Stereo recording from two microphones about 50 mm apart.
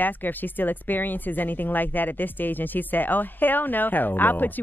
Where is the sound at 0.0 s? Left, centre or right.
Left.